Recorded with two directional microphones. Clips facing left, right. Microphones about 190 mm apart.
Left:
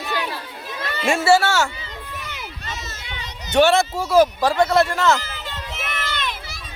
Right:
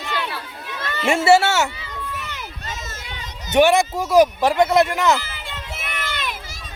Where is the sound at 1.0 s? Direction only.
20° right (ahead or behind).